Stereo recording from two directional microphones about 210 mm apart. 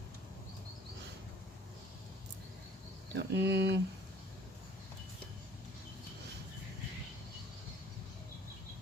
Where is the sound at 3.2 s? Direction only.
55° right (ahead or behind).